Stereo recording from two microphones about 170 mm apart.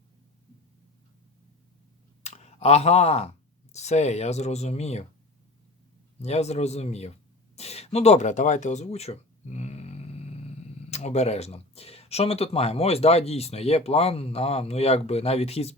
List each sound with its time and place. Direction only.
2.2 s speech: 40° left (ahead or behind)
6.2 s speech: 40° left (ahead or behind)
7.5 s a sound: 40° left (ahead or behind)
10.9 s speech: 40° left (ahead or behind)